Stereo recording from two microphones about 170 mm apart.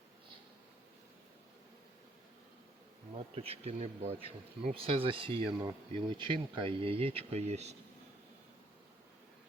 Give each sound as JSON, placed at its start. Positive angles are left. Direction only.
{"t": 3.2, "sound": "speech", "side_deg": -35}